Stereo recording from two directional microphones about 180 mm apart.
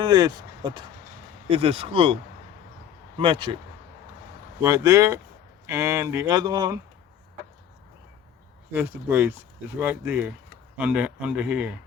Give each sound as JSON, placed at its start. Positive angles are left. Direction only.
{"t": 0.0, "sound": "speech", "side_deg": -25}
{"t": 1.5, "sound": "speech", "side_deg": -35}
{"t": 3.2, "sound": "speech", "side_deg": -30}
{"t": 4.6, "sound": "speech", "side_deg": -15}
{"t": 8.7, "sound": "speech", "side_deg": -10}